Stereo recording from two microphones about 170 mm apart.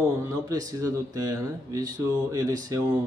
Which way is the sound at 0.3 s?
20° right (ahead or behind).